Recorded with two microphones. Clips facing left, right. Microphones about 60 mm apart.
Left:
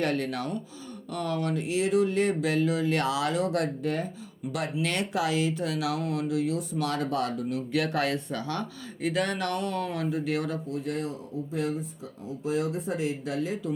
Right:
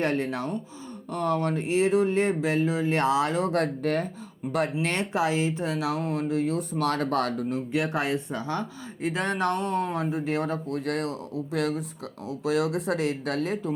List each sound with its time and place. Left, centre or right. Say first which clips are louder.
0.0 s speech: right 2 dB; right
4.5 s speech: right 3 dB; right
7.7 s speech: even; right
10.7 s speech: right 3 dB; right